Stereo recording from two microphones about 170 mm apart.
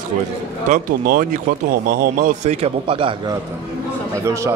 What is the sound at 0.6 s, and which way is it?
Speech, 55° right (ahead or behind).